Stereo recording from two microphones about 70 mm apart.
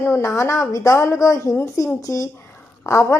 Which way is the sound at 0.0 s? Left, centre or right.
Left.